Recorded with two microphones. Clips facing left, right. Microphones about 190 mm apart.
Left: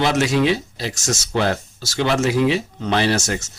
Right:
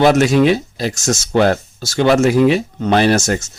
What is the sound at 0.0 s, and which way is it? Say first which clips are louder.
Speech: right 6 dB; 50° right (ahead or behind).